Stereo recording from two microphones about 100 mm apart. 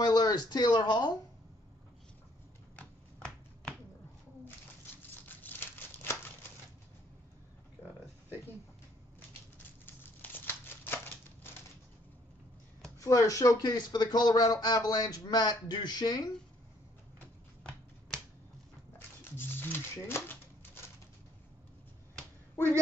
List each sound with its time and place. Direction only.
0.0 s speech: 45° left (ahead or behind)
2.8 s shuffling cards: 10° left (ahead or behind)
5.3 s crumpling: 20° left (ahead or behind)
9.8 s crumpling: 20° left (ahead or behind)
13.0 s speech: 35° left (ahead or behind)
17.2 s finger snapping: 10° left (ahead or behind)
18.9 s a sound: 20° left (ahead or behind)